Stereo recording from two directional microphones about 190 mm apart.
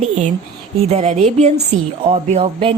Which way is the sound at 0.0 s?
35° right (ahead or behind).